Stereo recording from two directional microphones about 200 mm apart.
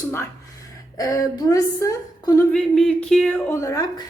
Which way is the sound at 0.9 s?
15° left (ahead or behind).